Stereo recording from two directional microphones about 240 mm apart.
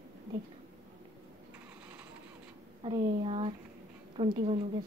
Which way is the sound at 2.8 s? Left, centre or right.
Right.